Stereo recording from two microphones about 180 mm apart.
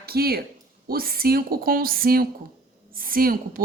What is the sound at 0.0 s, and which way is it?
Speech, 60° right (ahead or behind).